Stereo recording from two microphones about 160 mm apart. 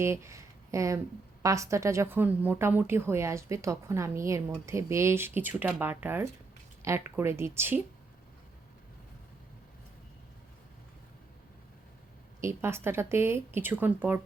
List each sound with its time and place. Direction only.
0.0 s a woman's voice: 15° right (ahead or behind)
12.4 s a woman's voice: 15° right (ahead or behind)